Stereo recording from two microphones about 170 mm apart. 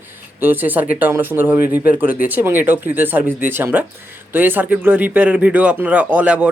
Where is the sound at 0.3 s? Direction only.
10° right (ahead or behind).